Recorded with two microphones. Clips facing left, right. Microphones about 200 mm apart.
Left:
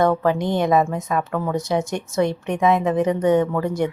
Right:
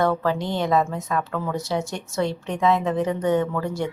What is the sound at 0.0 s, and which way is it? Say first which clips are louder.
Speech: left 4 dB; 20° left (ahead or behind).